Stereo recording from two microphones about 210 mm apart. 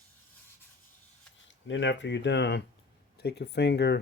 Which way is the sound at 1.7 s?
60° left (ahead or behind).